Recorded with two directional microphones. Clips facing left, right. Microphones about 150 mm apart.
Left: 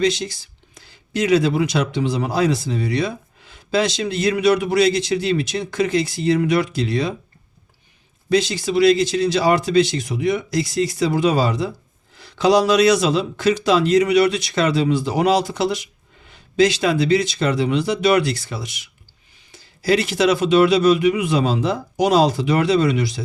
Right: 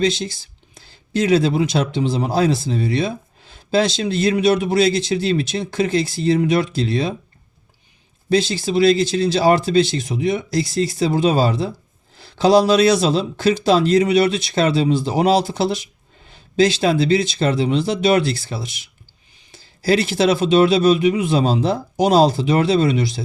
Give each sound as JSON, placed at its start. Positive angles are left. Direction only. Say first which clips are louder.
{"t": 0.0, "sound": "speech", "louder": "even", "side_deg": -30}
{"t": 8.3, "sound": "speech", "louder": "right 1 dB", "side_deg": -30}